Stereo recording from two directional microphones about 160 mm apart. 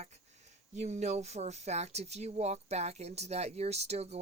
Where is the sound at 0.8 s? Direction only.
45° right (ahead or behind).